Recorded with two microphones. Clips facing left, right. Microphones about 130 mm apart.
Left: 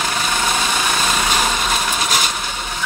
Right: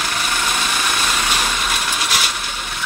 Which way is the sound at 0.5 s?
20° left (ahead or behind).